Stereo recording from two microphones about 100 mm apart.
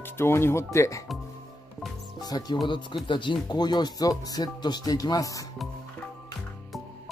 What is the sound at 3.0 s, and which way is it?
Speech, 55° left (ahead or behind).